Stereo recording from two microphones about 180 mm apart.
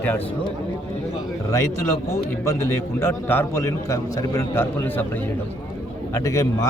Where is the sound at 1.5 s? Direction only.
15° left (ahead or behind).